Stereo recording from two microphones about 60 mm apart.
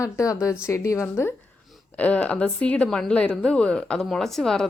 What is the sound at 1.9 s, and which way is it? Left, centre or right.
A woman's voice, left.